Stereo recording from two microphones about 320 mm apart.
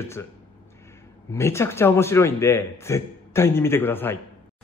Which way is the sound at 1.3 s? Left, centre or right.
Centre.